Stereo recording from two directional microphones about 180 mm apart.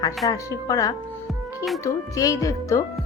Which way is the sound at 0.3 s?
20° left (ahead or behind).